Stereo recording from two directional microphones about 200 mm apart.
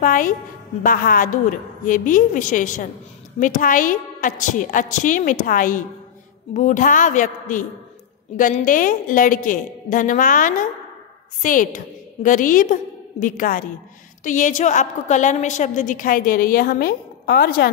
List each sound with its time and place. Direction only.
0.0 s a woman's voice: 40° left (ahead or behind)